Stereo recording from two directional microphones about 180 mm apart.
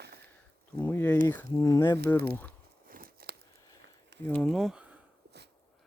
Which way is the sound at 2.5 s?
50° right (ahead or behind).